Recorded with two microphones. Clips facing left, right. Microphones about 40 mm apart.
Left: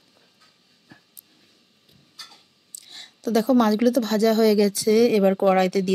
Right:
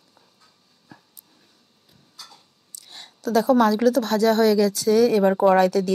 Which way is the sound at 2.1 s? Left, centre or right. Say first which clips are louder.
Left 1 dB; left.